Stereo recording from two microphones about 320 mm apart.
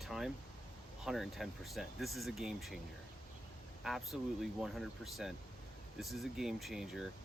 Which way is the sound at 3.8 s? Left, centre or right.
Centre.